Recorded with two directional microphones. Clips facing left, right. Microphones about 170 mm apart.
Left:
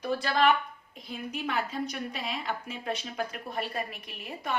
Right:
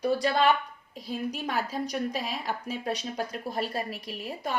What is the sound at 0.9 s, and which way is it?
A woman's voice, 40° right (ahead or behind).